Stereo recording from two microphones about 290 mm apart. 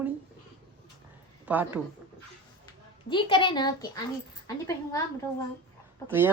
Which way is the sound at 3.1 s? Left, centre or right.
Centre.